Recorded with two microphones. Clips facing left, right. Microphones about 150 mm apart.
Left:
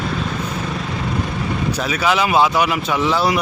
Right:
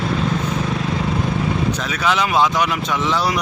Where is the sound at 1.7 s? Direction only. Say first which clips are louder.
Left 2 dB; 5° left (ahead or behind).